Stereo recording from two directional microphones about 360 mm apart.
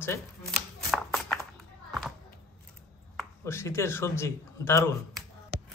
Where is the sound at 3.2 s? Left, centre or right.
Centre.